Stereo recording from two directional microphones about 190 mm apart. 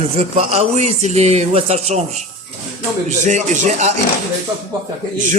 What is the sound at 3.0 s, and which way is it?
Speech, 40° right (ahead or behind).